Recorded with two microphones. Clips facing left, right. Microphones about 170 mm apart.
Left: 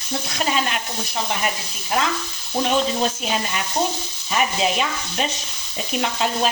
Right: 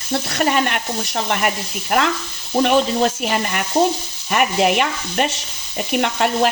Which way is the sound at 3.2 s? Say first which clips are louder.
Right 4 dB; 60° right (ahead or behind).